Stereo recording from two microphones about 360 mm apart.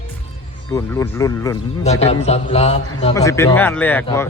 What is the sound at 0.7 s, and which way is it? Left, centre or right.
A man's voice, centre.